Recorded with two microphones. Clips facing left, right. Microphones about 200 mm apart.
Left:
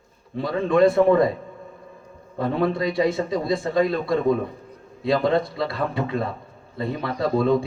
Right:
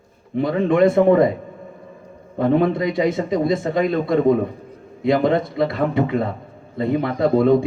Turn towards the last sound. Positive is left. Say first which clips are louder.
# right 5 dB
turn(degrees=-20)  # may be behind; listen again after turning